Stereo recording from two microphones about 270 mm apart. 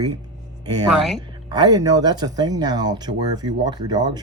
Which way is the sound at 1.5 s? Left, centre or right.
Centre.